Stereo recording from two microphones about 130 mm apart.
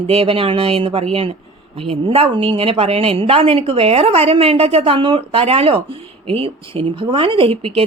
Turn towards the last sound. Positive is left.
turn(degrees=-45)  # may be behind; listen again after turning